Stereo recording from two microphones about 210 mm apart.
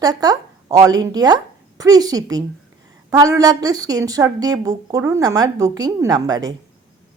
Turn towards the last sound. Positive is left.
turn(degrees=-20)  # may be behind; listen again after turning